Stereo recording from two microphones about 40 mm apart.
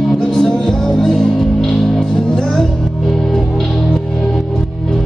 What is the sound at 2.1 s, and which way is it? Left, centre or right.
Music, centre.